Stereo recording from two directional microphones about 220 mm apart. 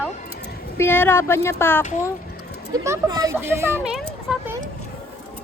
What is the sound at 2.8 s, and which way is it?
Speech, 15° right (ahead or behind).